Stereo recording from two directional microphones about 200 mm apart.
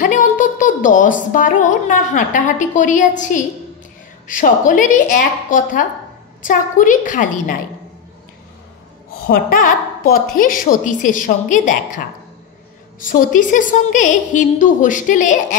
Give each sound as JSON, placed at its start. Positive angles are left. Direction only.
{"t": 0.0, "sound": "a woman's voice", "side_deg": 40}
{"t": 9.3, "sound": "a woman's voice", "side_deg": 45}
{"t": 13.0, "sound": "a woman's voice", "side_deg": 40}